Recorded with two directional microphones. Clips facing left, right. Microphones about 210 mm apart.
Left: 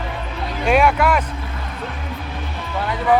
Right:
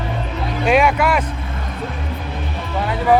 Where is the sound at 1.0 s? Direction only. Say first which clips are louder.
Even; 10° right (ahead or behind).